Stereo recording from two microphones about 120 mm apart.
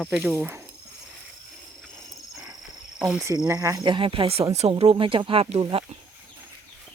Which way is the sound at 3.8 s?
45° right (ahead or behind).